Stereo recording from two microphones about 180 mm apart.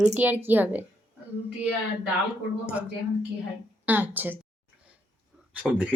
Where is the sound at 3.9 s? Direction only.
10° right (ahead or behind).